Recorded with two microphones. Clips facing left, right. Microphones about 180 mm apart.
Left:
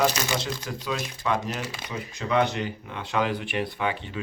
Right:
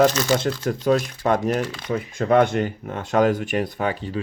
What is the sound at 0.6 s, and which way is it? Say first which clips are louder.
Speech: right 11 dB; 50° right (ahead or behind).